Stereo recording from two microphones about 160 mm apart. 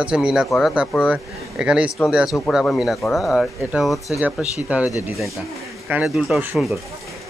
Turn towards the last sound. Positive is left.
turn(degrees=0)  # may be behind; listen again after turning